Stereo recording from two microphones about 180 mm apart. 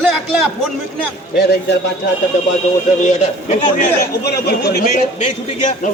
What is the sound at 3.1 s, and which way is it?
Speech, 40° left (ahead or behind).